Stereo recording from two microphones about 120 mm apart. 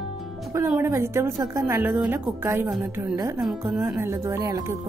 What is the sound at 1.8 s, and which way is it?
Speech, 5° right (ahead or behind).